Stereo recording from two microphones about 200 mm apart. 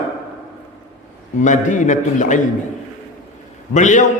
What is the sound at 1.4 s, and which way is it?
A man's voice, 40° left (ahead or behind).